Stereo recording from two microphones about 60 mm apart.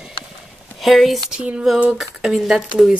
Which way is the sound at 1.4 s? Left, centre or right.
Centre.